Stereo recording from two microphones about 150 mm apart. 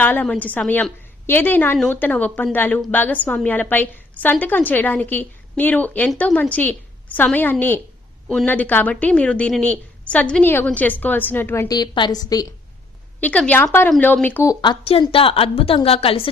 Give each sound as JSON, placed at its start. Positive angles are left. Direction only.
{"t": 0.0, "sound": "a woman's voice", "side_deg": 10}
{"t": 11.7, "sound": "a woman's voice", "side_deg": 30}
{"t": 13.1, "sound": "a woman's voice", "side_deg": 10}
{"t": 14.6, "sound": "a woman's voice", "side_deg": 35}